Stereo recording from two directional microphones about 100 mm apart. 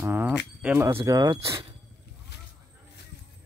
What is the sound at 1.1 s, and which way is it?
Speech, 40° right (ahead or behind).